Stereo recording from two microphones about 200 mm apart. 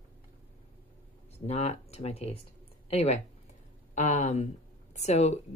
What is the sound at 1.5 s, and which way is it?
Speech, 30° left (ahead or behind).